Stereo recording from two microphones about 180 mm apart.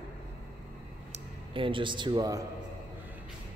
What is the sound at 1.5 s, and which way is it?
Speech, 30° right (ahead or behind).